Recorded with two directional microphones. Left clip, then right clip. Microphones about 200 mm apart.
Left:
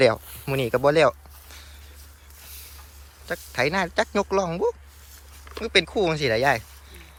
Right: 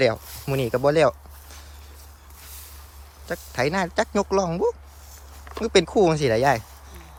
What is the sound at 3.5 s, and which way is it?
Speech, 5° right (ahead or behind).